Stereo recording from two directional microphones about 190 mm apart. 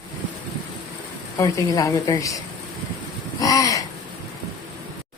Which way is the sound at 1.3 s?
20° left (ahead or behind).